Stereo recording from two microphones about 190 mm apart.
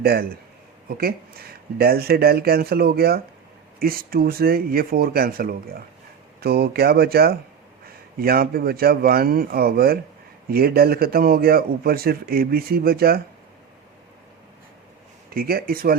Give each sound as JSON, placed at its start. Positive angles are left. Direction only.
{"t": 0.0, "sound": "a man's voice", "side_deg": -55}
{"t": 15.4, "sound": "a man's voice", "side_deg": -50}